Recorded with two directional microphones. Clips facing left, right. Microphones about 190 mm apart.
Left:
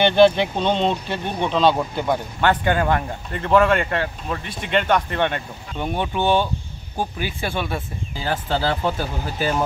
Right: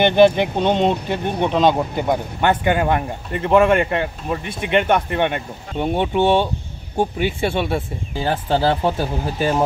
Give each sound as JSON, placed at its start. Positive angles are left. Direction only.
{"t": 0.0, "sound": "speech", "side_deg": -15}
{"t": 5.8, "sound": "speech", "side_deg": -25}